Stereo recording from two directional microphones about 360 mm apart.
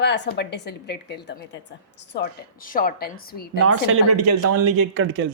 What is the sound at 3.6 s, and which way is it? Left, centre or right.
Speech, right.